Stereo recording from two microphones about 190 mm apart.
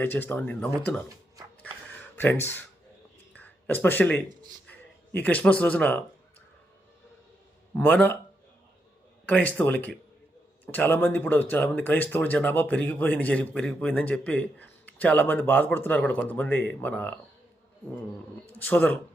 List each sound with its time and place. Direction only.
0.0 s speech: 10° left (ahead or behind)
1.0 s music: 20° right (ahead or behind)
2.1 s speech: 10° left (ahead or behind)
3.3 s a sound: 10° left (ahead or behind)
4.6 s speech: 10° left (ahead or behind)
7.8 s speech: 10° left (ahead or behind)
9.2 s speech: 10° left (ahead or behind)
18.5 s speech: 10° left (ahead or behind)